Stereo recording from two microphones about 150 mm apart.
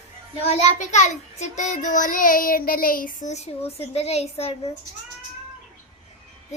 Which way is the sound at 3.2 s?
50° left (ahead or behind).